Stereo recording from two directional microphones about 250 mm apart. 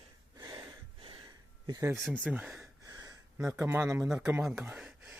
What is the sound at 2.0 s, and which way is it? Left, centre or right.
Speech, centre.